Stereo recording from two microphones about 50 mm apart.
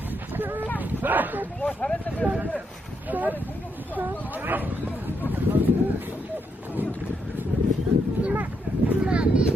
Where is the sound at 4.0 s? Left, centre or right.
Right.